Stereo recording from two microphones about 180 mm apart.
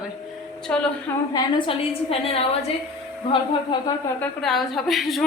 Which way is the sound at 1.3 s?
25° left (ahead or behind).